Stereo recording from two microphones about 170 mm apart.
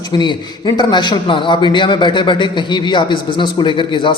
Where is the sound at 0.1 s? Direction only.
25° left (ahead or behind).